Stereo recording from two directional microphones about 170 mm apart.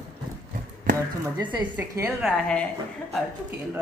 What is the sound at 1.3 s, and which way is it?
Speech, 25° right (ahead or behind).